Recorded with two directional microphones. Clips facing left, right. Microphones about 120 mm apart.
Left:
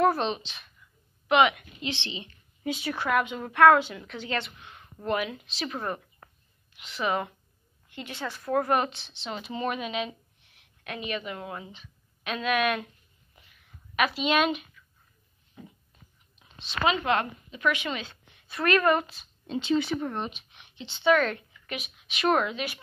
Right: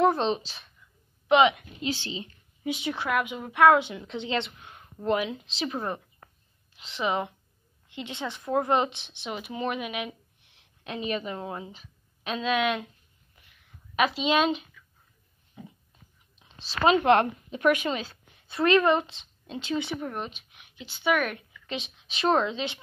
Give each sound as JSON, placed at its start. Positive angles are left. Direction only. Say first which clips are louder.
{"t": 0.0, "sound": "speech", "louder": "right 1 dB", "side_deg": -20}
{"t": 0.3, "sound": "a woman's voice", "louder": "right 4 dB", "side_deg": -35}
{"t": 1.3, "sound": "speech", "louder": "right 2 dB", "side_deg": -25}
{"t": 1.8, "sound": "a woman's voice", "louder": "right 3 dB", "side_deg": -40}
{"t": 2.6, "sound": "speech", "louder": "even", "side_deg": -15}
{"t": 10.8, "sound": "speech", "louder": "right 3 dB", "side_deg": -30}
{"t": 13.9, "sound": "speech", "louder": "right 1 dB", "side_deg": -25}
{"t": 15.6, "sound": "dog", "louder": "right 2 dB", "side_deg": -15}
{"t": 16.3, "sound": "a sound", "louder": "right 2 dB", "side_deg": -30}
{"t": 17.0, "sound": "a woman's voice", "louder": "right 6 dB", "side_deg": -55}
{"t": 17.8, "sound": "a sound", "louder": "right 4 dB", "side_deg": -35}
{"t": 18.6, "sound": "speech", "louder": "right 2 dB", "side_deg": -20}
{"t": 19.4, "sound": "speech", "louder": "left 4 dB", "side_deg": -5}
{"t": 21.6, "sound": "speech", "louder": "right 2 dB", "side_deg": -25}